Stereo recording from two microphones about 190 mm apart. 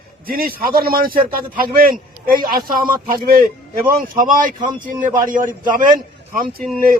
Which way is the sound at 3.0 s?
50° right (ahead or behind).